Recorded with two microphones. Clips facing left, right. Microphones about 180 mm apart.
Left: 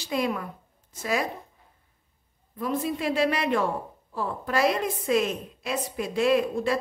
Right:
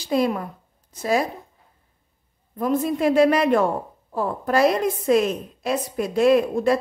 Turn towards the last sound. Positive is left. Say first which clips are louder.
# right 5 dB
turn(degrees=-45)  # may be behind; listen again after turning